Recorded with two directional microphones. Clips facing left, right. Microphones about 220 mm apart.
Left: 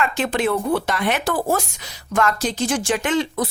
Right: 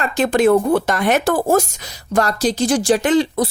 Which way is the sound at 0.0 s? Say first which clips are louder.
Right 6 dB; 40° right (ahead or behind).